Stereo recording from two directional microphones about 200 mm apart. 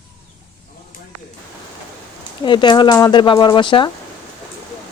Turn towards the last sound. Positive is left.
turn(degrees=25)  # may be behind; listen again after turning